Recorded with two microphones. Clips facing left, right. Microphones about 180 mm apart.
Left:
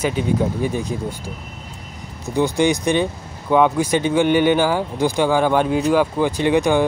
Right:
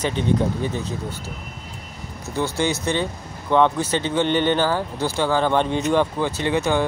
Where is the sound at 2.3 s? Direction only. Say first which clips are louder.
Left 5 dB; 15° left (ahead or behind).